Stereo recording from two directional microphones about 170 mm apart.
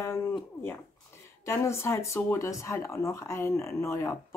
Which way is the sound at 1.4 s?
15° left (ahead or behind).